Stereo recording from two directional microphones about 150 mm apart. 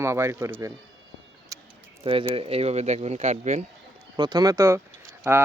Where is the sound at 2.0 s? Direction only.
35° right (ahead or behind).